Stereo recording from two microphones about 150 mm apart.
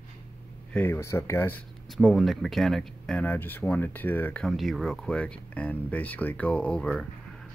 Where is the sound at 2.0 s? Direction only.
Centre (ahead or behind).